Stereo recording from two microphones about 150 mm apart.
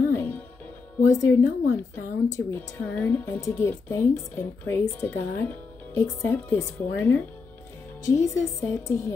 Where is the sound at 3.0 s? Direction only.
15° left (ahead or behind).